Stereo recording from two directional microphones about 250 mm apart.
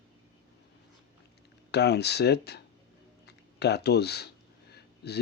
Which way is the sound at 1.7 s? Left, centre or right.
Left.